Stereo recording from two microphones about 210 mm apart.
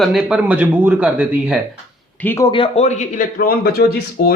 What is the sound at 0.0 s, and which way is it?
Speech, centre (ahead or behind).